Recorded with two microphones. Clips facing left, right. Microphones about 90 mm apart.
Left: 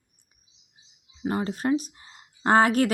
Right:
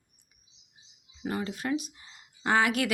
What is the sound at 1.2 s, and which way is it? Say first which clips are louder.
Speech: left 5 dB; 30° left (ahead or behind).